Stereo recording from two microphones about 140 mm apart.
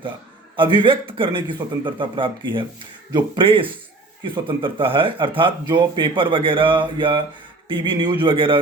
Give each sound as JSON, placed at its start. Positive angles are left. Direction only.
{"t": 0.5, "sound": "speech", "side_deg": -35}